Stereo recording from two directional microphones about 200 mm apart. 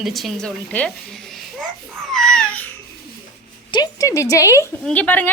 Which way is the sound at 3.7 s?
20° left (ahead or behind).